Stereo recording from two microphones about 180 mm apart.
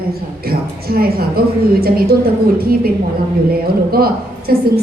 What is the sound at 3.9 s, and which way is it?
Speech, 55° right (ahead or behind).